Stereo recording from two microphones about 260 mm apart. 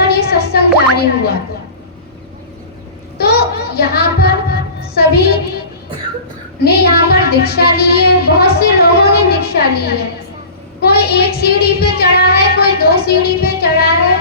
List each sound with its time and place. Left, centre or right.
0.1 s a sound: left
3.2 s child singing: left
6.6 s child singing: left